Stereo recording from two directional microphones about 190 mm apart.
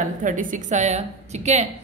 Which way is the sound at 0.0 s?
45° right (ahead or behind).